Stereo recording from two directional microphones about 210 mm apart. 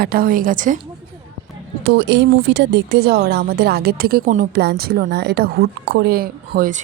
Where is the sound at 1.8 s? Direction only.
55° right (ahead or behind).